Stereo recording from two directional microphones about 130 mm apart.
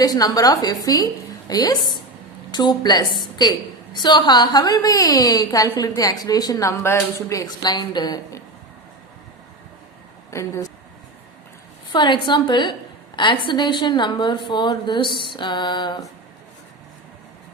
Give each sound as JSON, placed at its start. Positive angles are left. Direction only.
{"t": 0.0, "sound": "a woman's voice", "side_deg": 30}
{"t": 10.3, "sound": "a woman's voice", "side_deg": 20}
{"t": 11.9, "sound": "a woman's voice", "side_deg": 35}